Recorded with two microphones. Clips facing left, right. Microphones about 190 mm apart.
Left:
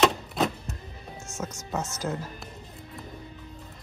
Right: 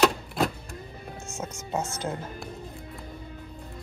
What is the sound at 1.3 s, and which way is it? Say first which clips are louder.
Speech: even; 30° right (ahead or behind).